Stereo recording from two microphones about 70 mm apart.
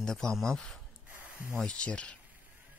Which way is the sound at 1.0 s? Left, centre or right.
Right.